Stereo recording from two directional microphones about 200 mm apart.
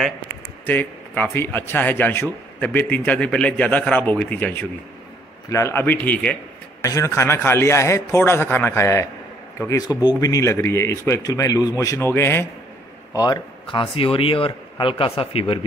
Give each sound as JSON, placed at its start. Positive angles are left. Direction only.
{"t": 0.7, "sound": "a man's voice", "side_deg": 10}